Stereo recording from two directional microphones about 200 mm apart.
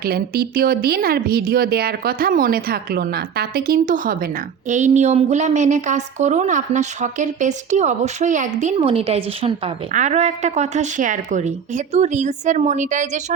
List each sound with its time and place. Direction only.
0.0 s speech: 50° right (ahead or behind)